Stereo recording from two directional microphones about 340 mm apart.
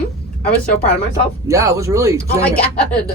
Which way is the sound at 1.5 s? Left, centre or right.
Centre.